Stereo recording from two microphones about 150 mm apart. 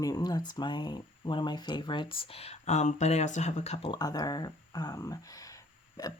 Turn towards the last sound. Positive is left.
turn(degrees=25)  # may be behind; listen again after turning